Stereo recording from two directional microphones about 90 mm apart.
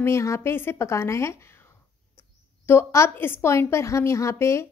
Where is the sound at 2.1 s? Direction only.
25° left (ahead or behind).